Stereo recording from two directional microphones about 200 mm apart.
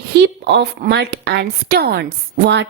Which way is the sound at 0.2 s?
55° right (ahead or behind).